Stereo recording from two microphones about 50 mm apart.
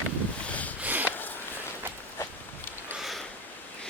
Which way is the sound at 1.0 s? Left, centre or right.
Left.